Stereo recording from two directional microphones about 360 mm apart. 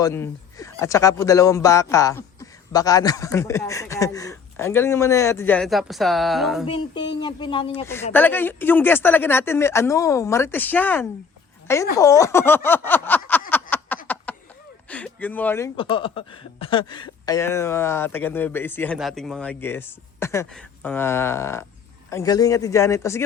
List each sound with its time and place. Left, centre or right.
0.0 s speech: centre
6.7 s speech: centre
13.5 s a sound: centre
14.8 s speech: centre